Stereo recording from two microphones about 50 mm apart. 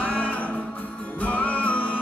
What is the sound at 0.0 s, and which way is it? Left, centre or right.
Music, left.